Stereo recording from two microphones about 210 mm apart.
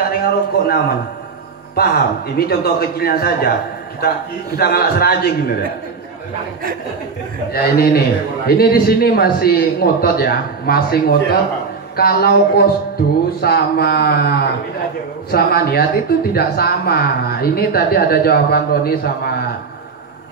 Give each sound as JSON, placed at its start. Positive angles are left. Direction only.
{"t": 0.0, "sound": "a sound", "side_deg": 45}
{"t": 1.8, "sound": "speech", "side_deg": 45}
{"t": 4.6, "sound": "speech", "side_deg": 45}
{"t": 7.5, "sound": "speech", "side_deg": 45}